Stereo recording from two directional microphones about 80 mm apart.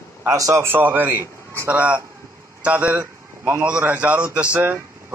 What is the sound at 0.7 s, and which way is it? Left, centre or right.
A man's voice, right.